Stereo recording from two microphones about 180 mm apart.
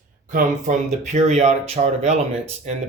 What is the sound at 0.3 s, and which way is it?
Speech, 45° right (ahead or behind).